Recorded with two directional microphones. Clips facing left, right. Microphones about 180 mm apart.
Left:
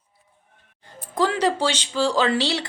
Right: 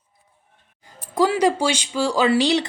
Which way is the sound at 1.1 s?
10° right (ahead or behind).